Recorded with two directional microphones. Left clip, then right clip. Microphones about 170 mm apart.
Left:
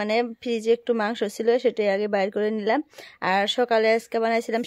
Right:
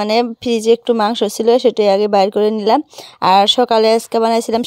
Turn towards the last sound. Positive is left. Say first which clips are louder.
# right 9 dB
turn(degrees=-30)  # may be behind; listen again after turning